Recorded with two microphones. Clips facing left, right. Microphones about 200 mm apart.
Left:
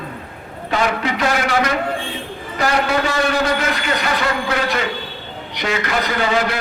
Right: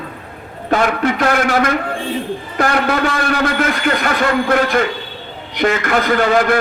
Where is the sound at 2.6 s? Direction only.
55° right (ahead or behind).